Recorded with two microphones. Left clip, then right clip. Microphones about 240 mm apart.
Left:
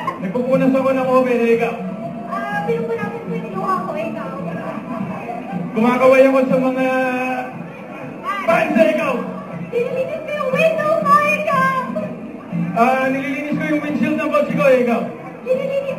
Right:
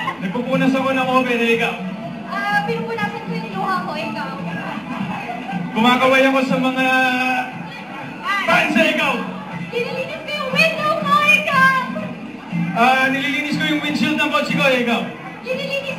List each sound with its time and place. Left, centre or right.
0.5 s a man's voice: centre
5.8 s a man's voice: right
10.5 s music: right
12.7 s a man's voice: right